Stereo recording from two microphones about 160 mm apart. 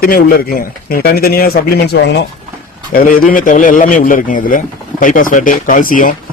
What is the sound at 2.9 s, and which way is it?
A man's voice, 60° left (ahead or behind).